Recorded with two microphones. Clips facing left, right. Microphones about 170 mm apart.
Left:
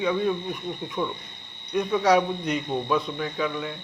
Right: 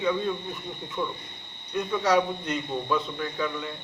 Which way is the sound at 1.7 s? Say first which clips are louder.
Left 3 dB; 15° left (ahead or behind).